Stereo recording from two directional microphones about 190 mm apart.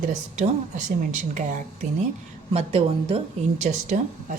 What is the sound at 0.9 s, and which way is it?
Speech, 40° right (ahead or behind).